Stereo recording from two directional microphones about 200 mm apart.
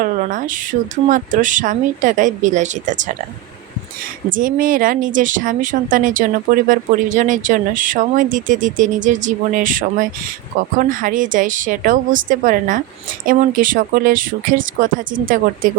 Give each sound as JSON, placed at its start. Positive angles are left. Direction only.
{"t": 0.0, "sound": "a woman's voice", "side_deg": -40}
{"t": 4.3, "sound": "a woman's voice", "side_deg": -40}